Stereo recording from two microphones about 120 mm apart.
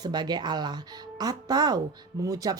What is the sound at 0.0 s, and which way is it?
Speech, 35° right (ahead or behind).